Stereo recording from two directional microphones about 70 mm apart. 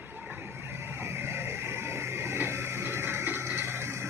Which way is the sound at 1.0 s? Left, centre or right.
Right.